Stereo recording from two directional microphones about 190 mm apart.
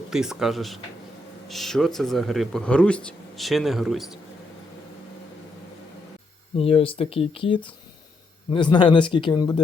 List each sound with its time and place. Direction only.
0.1 s speech: 5° right (ahead or behind)
6.6 s speech: 30° left (ahead or behind)